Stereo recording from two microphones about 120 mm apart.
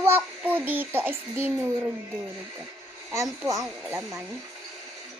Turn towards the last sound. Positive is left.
turn(degrees=-30)  # may be behind; listen again after turning